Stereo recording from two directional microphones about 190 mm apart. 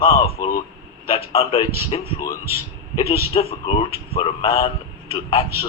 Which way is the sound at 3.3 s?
30° left (ahead or behind).